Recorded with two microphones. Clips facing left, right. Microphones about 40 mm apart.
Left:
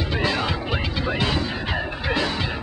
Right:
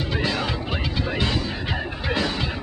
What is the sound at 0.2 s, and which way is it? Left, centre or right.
Music, centre.